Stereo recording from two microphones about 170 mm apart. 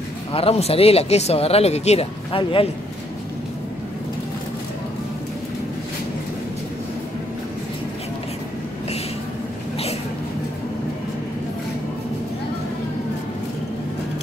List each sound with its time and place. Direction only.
0.3 s speech: 35° left (ahead or behind)